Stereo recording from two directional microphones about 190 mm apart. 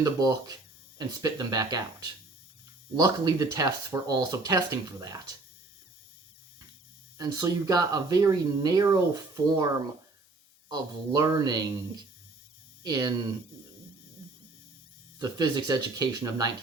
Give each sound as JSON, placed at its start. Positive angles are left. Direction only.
{"t": 0.0, "sound": "speech", "side_deg": -20}
{"t": 7.2, "sound": "speech", "side_deg": -20}
{"t": 10.7, "sound": "speech", "side_deg": -20}
{"t": 12.8, "sound": "speech", "side_deg": -20}
{"t": 15.2, "sound": "speech", "side_deg": -20}